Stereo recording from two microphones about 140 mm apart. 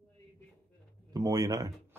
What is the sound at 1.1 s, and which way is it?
Speech, 25° right (ahead or behind).